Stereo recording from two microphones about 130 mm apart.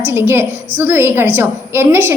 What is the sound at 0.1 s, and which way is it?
A woman's voice, 15° right (ahead or behind).